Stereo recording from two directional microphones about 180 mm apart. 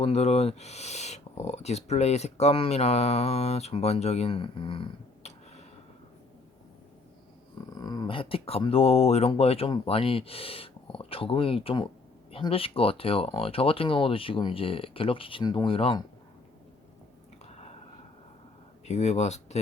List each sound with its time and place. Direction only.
0.0 s speech: 35° left (ahead or behind)
7.8 s speech: 20° left (ahead or behind)
17.4 s whispering: 35° left (ahead or behind)
18.9 s speech: 40° left (ahead or behind)